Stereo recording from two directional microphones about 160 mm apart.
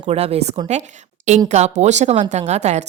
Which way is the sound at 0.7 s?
45° right (ahead or behind).